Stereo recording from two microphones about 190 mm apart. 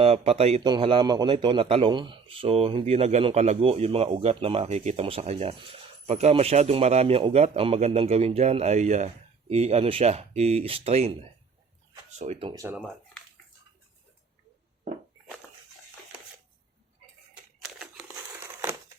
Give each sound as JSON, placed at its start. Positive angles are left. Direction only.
{"t": 0.0, "sound": "a man's voice", "side_deg": -30}
{"t": 12.2, "sound": "a man's voice", "side_deg": -35}
{"t": 12.5, "sound": "speech", "side_deg": -20}
{"t": 12.7, "sound": "speech", "side_deg": 0}
{"t": 17.7, "sound": "crumpling", "side_deg": -5}
{"t": 18.4, "sound": "crushing", "side_deg": -15}